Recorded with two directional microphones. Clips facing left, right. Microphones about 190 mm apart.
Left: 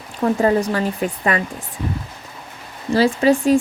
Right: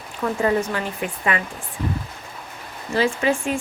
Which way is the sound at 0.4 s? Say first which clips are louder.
Left 2 dB; 35° left (ahead or behind).